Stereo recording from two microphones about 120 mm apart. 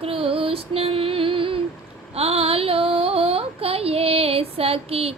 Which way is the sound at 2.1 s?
60° right (ahead or behind).